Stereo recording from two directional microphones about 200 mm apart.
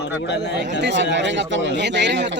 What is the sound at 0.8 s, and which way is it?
A man's voice, 60° right (ahead or behind).